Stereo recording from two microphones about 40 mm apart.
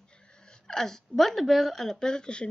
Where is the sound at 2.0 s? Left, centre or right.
Centre.